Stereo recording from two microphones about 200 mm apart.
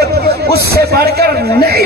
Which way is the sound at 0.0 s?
55° right (ahead or behind).